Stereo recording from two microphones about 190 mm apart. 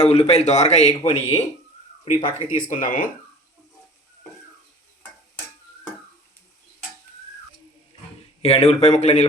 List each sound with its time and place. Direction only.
0.0 s a man's voice: 35° left (ahead or behind)
8.4 s a man's voice: 30° left (ahead or behind)